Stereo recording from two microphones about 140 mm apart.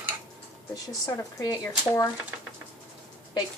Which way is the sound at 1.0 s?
25° left (ahead or behind).